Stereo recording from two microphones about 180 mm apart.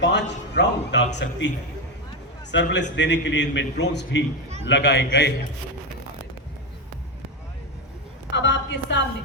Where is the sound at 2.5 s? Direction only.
85° left.